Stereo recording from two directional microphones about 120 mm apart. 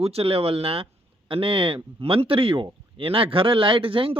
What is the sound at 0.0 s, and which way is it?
Speech, 55° right (ahead or behind).